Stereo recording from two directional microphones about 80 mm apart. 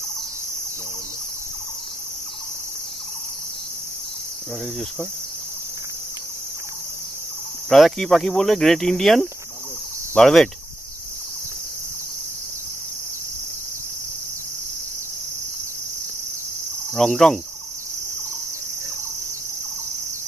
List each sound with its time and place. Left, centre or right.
7.7 s speech: centre
16.9 s speech: centre